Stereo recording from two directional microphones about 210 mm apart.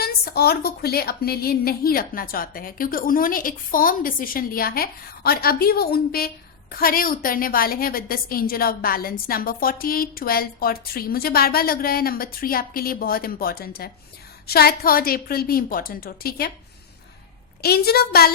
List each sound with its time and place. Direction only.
0.0 s a woman's voice: 50° left (ahead or behind)
17.6 s a woman's voice: 50° left (ahead or behind)